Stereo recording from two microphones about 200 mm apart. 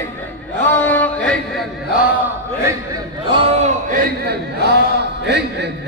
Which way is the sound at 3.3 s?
35° right (ahead or behind).